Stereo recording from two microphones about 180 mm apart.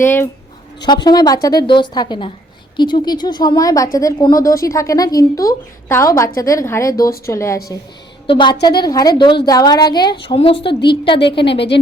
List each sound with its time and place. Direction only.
0.0 s a woman's voice: 10° left (ahead or behind)
1.0 s a woman's voice: 20° left (ahead or behind)
8.3 s speech: 25° left (ahead or behind)